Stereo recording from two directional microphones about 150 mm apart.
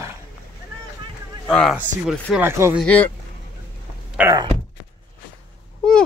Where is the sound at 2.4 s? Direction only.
15° right (ahead or behind).